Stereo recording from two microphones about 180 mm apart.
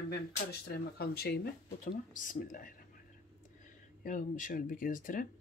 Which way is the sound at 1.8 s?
45° left (ahead or behind).